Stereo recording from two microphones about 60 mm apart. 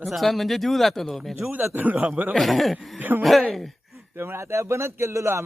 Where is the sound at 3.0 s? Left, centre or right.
Right.